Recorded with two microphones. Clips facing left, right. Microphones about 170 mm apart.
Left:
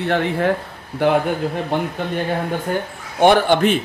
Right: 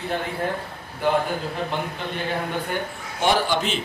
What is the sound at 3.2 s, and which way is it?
Speech, 55° left (ahead or behind).